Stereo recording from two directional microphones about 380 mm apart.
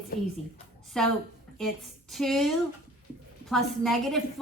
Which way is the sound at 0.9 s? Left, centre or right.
Centre.